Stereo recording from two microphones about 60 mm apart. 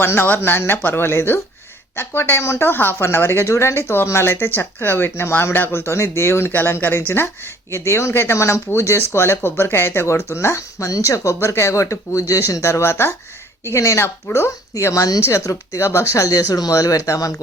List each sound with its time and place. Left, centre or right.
0.0 s speech: left
5.8 s speech: left
6.5 s speech: left
7.7 s speech: left
12.6 s speech: left
13.7 s speech: left